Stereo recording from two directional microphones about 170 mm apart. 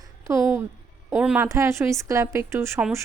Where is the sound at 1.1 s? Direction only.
5° right (ahead or behind).